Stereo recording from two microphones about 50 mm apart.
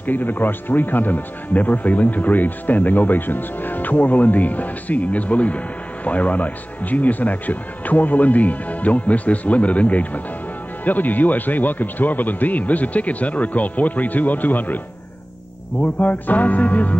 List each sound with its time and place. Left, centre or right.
0.0 s speech: left
15.8 s speech: left